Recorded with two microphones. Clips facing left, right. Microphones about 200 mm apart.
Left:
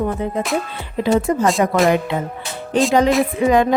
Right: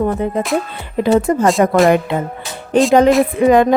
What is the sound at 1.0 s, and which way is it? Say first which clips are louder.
Music: right 3 dB; 50° right (ahead or behind).